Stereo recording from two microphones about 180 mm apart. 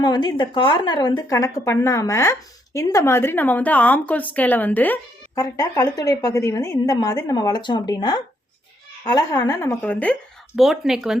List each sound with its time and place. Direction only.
0.0 s a woman's voice: 25° left (ahead or behind)
5.3 s a woman's voice: 20° left (ahead or behind); by 11.2 s centre (ahead or behind)